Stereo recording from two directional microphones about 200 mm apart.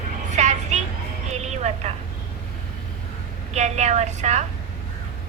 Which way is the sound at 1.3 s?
35° right (ahead or behind).